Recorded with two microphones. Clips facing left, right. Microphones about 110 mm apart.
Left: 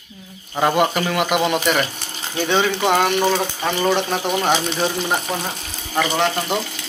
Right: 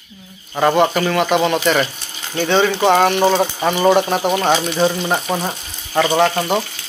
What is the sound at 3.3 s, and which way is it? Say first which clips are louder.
Speech: right 4 dB; 25° right (ahead or behind).